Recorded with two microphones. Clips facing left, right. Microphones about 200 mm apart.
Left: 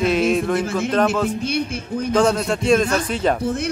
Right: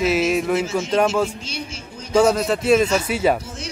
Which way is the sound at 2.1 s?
5° right (ahead or behind).